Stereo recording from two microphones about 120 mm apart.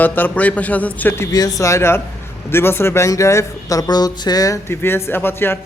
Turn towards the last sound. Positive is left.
turn(degrees=20)  # may be behind; listen again after turning